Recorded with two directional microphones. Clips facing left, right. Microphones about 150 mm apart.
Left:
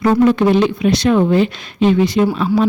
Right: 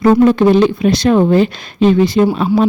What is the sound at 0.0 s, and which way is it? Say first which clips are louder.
Speech: right 3 dB; 35° right (ahead or behind).